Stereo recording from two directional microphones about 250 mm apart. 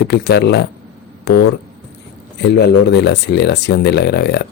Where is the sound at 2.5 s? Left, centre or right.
Left.